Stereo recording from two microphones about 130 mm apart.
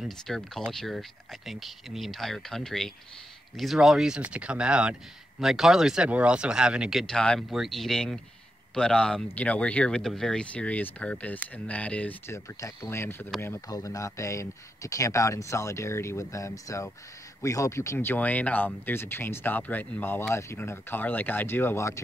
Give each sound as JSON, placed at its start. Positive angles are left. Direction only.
{"t": 0.0, "sound": "speech", "side_deg": 0}
{"t": 12.5, "sound": "speech", "side_deg": 20}